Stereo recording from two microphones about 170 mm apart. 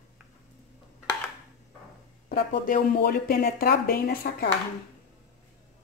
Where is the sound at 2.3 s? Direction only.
60° left (ahead or behind).